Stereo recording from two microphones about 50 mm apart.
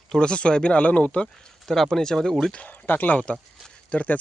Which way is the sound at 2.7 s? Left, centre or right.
Left.